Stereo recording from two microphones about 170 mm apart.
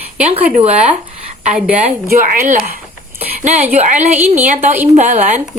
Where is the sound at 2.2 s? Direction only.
50° right (ahead or behind).